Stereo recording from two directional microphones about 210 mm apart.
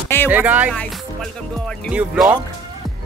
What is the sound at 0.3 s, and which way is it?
Speech, 10° right (ahead or behind).